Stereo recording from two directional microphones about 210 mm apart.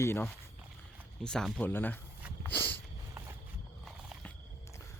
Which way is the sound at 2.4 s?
10° left (ahead or behind).